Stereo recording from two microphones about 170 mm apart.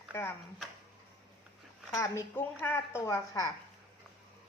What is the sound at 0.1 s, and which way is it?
Speech, 15° left (ahead or behind).